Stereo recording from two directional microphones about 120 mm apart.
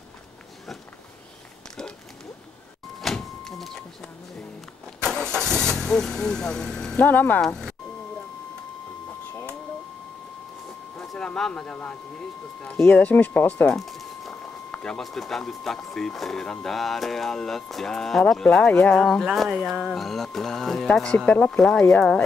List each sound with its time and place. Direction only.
3.0 s vehicle: 5° left (ahead or behind)
7.4 s speech: 5° left (ahead or behind)
11.0 s speech: 10° left (ahead or behind)
13.7 s speech: centre (ahead or behind)